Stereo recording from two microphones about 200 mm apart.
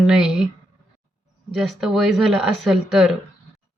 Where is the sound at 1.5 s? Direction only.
Centre (ahead or behind).